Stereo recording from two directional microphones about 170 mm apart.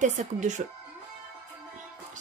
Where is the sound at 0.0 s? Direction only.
45° right (ahead or behind).